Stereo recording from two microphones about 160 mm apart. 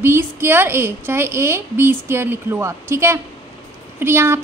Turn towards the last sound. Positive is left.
turn(degrees=-15)  # may be behind; listen again after turning